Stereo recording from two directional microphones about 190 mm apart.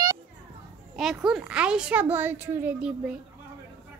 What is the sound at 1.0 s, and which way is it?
A woman's voice, 5° right (ahead or behind).